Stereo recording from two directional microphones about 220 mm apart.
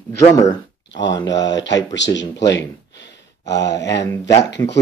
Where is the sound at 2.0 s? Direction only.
55° left (ahead or behind).